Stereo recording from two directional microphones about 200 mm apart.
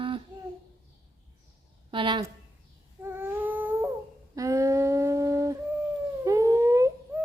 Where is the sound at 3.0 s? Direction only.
10° right (ahead or behind).